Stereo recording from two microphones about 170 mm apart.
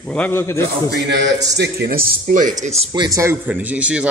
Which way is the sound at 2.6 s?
40° right (ahead or behind).